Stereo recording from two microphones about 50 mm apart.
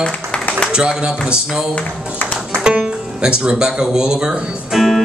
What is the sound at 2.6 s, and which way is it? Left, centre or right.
Speech, centre.